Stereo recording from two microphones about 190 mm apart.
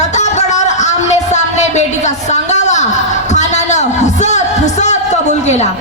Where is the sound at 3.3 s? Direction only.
40° left (ahead or behind).